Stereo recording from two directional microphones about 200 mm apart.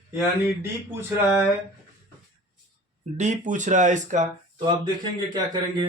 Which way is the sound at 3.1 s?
35° right (ahead or behind).